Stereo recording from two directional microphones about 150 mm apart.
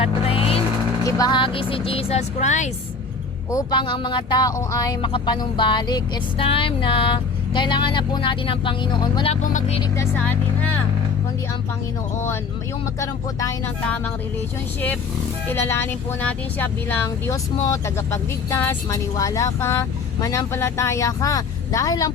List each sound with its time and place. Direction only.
0.0 s vehicle: 40° left (ahead or behind)
1.0 s speech: 25° left (ahead or behind); by 2.6 s 50° left (ahead or behind)
3.5 s speech: 25° left (ahead or behind)
9.3 s speech: 55° left (ahead or behind)
9.9 s speech: 15° left (ahead or behind)
13.0 s speech: 20° left (ahead or behind)
13.8 s speech: 10° left (ahead or behind)
15.4 s speech: 15° left (ahead or behind)